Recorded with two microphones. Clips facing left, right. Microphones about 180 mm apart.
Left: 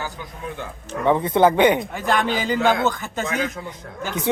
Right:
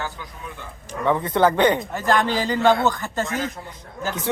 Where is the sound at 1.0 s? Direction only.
15° left (ahead or behind).